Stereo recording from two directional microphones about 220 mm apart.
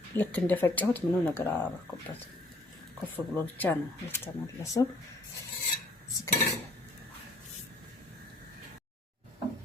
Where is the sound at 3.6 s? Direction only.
10° left (ahead or behind).